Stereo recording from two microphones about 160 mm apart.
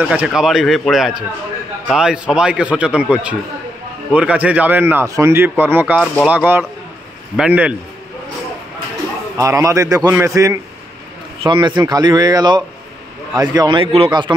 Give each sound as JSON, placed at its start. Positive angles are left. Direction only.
{"t": 0.0, "sound": "a man's voice", "side_deg": -10}
{"t": 9.4, "sound": "a man's voice", "side_deg": -20}
{"t": 11.4, "sound": "a man's voice", "side_deg": -30}